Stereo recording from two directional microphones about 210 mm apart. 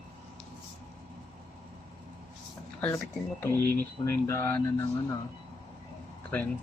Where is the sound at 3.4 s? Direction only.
10° left (ahead or behind).